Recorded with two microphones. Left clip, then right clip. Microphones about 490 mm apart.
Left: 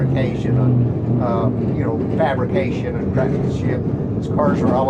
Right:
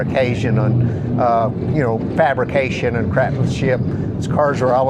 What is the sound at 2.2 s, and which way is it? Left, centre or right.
Speech, right.